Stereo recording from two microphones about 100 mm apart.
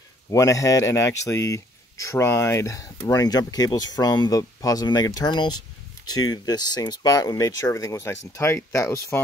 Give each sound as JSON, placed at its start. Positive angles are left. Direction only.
{"t": 0.3, "sound": "speech", "side_deg": 35}